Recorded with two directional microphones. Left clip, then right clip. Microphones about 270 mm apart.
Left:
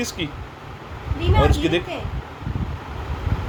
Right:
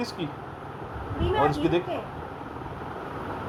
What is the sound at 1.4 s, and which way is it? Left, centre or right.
Speech, left.